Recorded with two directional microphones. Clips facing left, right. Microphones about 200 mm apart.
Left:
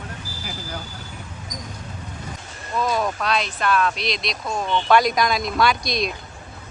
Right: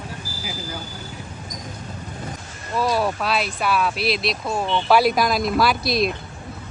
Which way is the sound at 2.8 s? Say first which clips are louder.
Right 2 dB; 5° right (ahead or behind).